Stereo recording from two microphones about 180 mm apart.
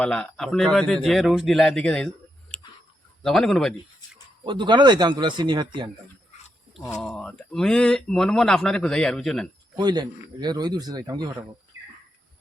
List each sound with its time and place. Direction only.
0.0 s speech: 5° left (ahead or behind)
4.4 s a man's voice: 25° right (ahead or behind)
6.8 s speech: 5° left (ahead or behind)
9.7 s a man's voice: 25° right (ahead or behind)